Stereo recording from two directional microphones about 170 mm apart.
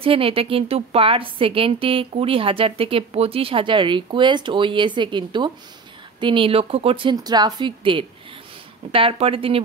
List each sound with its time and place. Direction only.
0.0 s a woman's voice: 30° right (ahead or behind)